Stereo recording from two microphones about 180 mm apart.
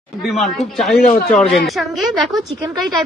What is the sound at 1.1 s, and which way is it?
Speech, 50° left (ahead or behind).